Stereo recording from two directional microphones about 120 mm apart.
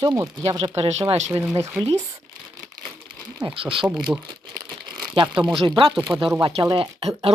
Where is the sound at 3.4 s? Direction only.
45° right (ahead or behind).